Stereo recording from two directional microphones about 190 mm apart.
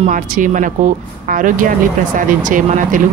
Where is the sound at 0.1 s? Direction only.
45° right (ahead or behind).